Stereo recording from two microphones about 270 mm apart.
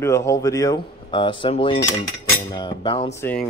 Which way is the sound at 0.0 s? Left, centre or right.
Centre.